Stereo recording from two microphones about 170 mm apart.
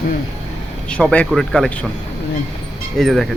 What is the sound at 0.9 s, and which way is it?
Speech, 5° left (ahead or behind).